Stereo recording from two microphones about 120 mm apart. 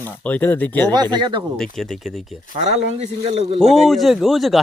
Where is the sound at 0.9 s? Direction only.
35° right (ahead or behind).